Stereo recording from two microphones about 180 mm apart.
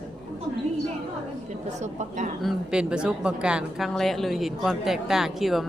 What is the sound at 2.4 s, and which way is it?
Speech, 5° right (ahead or behind).